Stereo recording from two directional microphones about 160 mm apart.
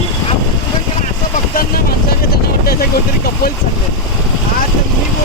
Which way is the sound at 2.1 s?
75° left (ahead or behind).